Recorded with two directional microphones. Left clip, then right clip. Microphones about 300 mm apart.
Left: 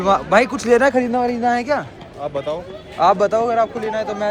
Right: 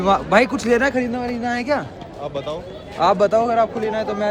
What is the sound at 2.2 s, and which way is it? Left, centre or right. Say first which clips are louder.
Speech: left 3 dB; left.